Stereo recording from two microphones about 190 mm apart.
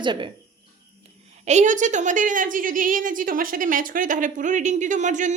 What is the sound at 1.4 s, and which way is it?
A woman's voice, 40° right (ahead or behind).